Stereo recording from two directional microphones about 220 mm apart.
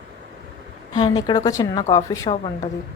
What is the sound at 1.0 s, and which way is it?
A woman's voice, 20° left (ahead or behind).